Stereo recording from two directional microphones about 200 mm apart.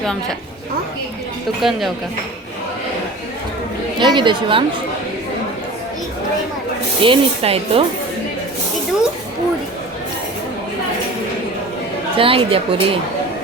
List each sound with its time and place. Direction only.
1.6 s speech: centre (ahead or behind)
4.0 s speech: 25° right (ahead or behind)
7.0 s speech: 30° right (ahead or behind)
12.1 s speech: 25° right (ahead or behind)